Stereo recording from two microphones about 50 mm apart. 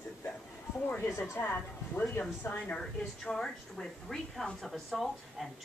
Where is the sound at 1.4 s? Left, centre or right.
Left.